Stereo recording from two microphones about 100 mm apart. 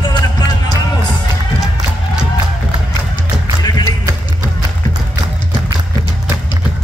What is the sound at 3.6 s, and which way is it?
Music, 40° left (ahead or behind).